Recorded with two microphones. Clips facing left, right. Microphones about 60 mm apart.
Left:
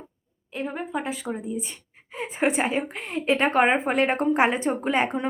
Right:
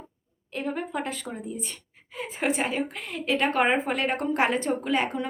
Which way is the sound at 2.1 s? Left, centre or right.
Left.